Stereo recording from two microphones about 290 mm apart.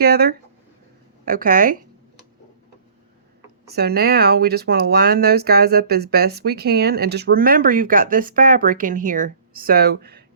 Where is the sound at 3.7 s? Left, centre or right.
Right.